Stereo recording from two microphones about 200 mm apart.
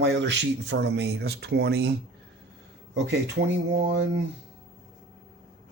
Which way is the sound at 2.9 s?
60° right (ahead or behind).